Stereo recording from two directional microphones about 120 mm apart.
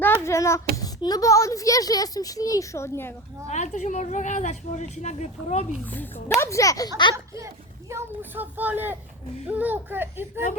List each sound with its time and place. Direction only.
0.0 s a child's voice: 20° left (ahead or behind)
3.4 s a woman's voice: 80° left
5.8 s a woman's voice: 15° left (ahead or behind)
6.4 s speech: 25° left (ahead or behind)
7.3 s speech: 25° right (ahead or behind)